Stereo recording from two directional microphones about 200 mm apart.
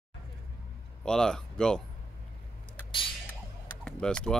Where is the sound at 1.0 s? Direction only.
5° left (ahead or behind).